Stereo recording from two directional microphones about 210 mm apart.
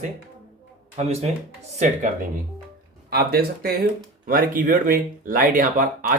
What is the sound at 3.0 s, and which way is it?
Speech, 45° right (ahead or behind).